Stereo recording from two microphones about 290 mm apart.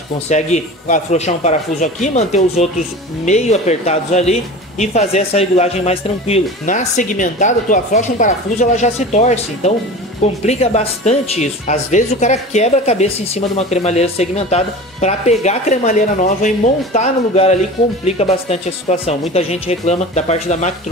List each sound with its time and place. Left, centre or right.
0.3 s speech: left